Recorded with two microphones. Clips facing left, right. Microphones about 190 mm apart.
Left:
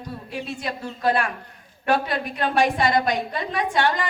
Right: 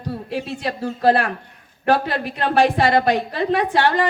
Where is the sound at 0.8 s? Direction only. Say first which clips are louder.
Right 6 dB; 35° right (ahead or behind).